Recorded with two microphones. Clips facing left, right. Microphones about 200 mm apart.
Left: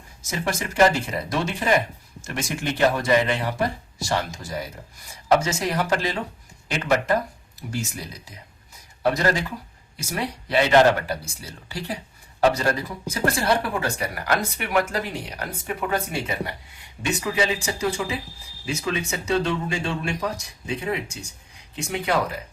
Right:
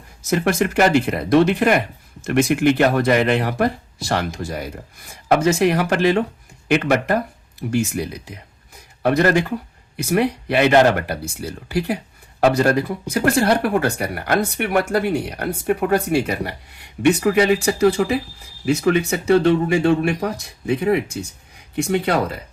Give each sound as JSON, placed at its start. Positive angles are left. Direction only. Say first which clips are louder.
{"t": 0.3, "sound": "speech", "louder": "right 9 dB", "side_deg": -60}